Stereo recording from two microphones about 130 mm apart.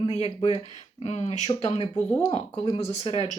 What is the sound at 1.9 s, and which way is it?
Speech, 10° left (ahead or behind).